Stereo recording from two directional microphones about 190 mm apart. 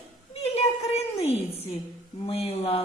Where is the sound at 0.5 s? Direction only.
35° left (ahead or behind).